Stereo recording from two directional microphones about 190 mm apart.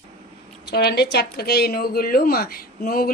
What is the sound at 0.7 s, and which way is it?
Speech, 60° left (ahead or behind).